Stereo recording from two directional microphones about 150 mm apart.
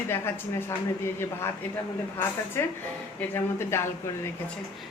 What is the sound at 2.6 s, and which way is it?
A woman's voice, 15° left (ahead or behind).